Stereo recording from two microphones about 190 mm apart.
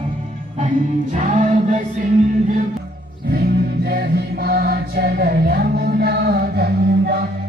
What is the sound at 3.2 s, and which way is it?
Music, 55° right (ahead or behind).